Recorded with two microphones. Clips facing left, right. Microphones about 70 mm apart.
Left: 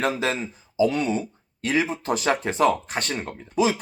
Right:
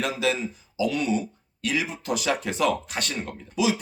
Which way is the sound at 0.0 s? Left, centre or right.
Left.